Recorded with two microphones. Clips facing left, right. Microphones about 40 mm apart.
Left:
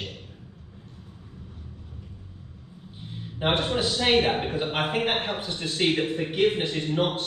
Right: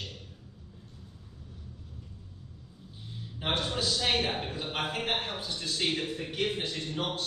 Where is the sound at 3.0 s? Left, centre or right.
Left.